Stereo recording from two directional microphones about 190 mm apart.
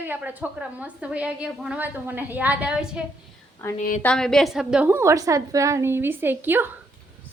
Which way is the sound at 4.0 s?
5° left (ahead or behind).